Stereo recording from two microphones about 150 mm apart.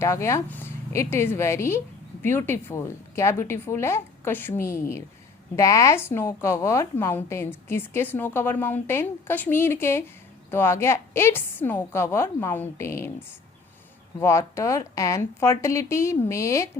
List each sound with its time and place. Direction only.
0.0 s a woman's voice: 20° left (ahead or behind)